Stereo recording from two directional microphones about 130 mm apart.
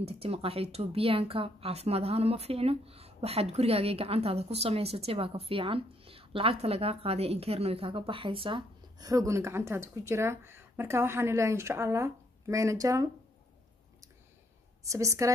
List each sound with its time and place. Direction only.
0.0 s speech: 50° right (ahead or behind); by 13.1 s 25° right (ahead or behind)
14.8 s a woman's voice: 25° right (ahead or behind)